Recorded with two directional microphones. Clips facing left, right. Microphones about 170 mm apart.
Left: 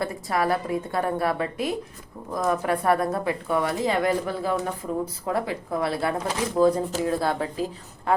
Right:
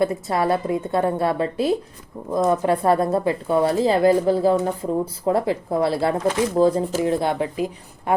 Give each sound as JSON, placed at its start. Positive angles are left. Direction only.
{"t": 0.0, "sound": "speech", "side_deg": -25}